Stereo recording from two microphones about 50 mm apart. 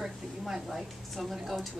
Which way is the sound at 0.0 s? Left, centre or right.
Centre.